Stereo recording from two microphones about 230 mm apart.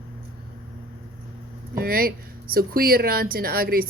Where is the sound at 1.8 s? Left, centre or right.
Right.